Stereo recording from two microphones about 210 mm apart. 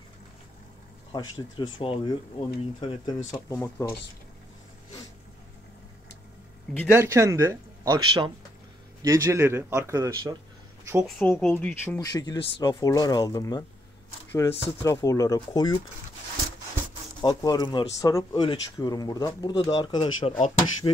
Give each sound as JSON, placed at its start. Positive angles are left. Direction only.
{"t": 1.6, "sound": "speech", "side_deg": 25}
{"t": 3.4, "sound": "speech", "side_deg": 15}
{"t": 6.9, "sound": "speech", "side_deg": -15}
{"t": 10.9, "sound": "speech", "side_deg": -5}
{"t": 11.1, "sound": "speech", "side_deg": 10}
{"t": 14.8, "sound": "speech", "side_deg": 15}
{"t": 17.2, "sound": "speech", "side_deg": 20}